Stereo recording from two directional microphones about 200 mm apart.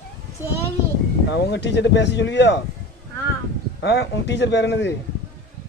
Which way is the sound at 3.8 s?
60° left (ahead or behind).